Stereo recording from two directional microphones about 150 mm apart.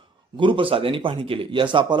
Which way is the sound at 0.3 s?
35° right (ahead or behind).